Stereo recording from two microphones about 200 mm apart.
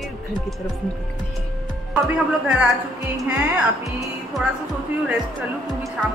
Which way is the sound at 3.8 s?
Centre (ahead or behind).